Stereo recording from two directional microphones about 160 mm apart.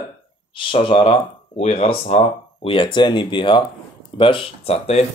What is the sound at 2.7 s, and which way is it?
Speech, 30° left (ahead or behind).